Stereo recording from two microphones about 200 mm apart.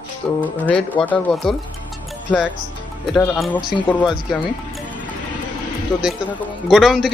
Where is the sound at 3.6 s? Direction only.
20° left (ahead or behind).